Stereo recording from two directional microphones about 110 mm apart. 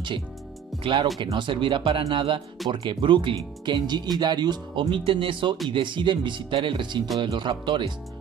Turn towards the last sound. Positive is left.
turn(degrees=-45)  # may be behind; listen again after turning